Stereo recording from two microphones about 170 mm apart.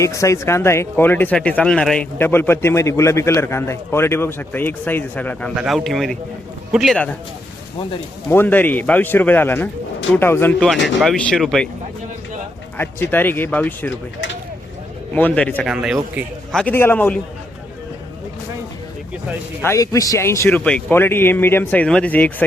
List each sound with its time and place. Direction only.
0.0 s speech: 20° left (ahead or behind)
8.3 s speech: 10° left (ahead or behind)
10.8 s speech: centre (ahead or behind)
12.7 s speech: 10° left (ahead or behind)
15.1 s speech: 10° left (ahead or behind)
15.6 s speech: 5° right (ahead or behind)
16.7 s speech: 10° left (ahead or behind)
19.6 s speech: 20° left (ahead or behind)